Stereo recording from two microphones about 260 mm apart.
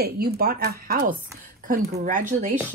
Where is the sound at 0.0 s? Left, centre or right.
Right.